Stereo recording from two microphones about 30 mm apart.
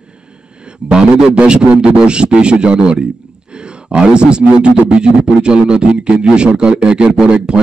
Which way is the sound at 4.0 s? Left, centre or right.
Right.